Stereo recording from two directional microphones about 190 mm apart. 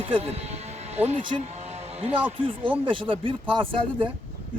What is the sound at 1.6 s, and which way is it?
Music, 35° right (ahead or behind).